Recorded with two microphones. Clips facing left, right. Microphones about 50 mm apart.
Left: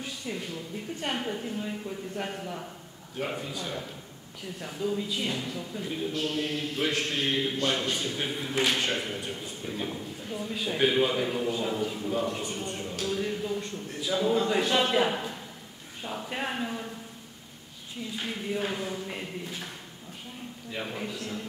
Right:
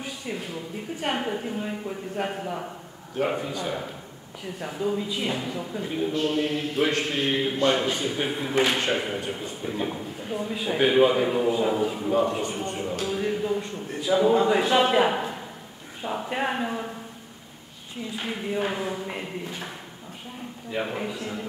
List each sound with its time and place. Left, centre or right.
0.3 s a sound: centre
1.0 s a man's voice: centre
10.3 s a man's voice: centre
11.4 s speech: centre
12.0 s a man's voice: right
18.1 s a man's voice: centre
20.7 s a man's voice: centre